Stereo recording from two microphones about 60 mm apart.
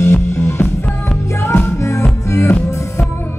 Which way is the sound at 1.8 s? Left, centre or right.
Left.